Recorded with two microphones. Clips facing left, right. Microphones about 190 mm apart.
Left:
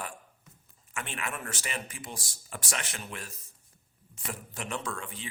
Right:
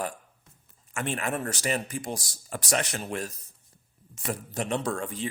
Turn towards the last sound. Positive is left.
turn(degrees=-40)  # may be behind; listen again after turning